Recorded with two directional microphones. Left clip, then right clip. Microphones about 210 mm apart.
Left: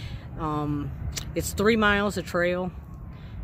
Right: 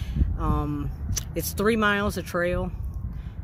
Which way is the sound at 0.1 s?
Centre (ahead or behind).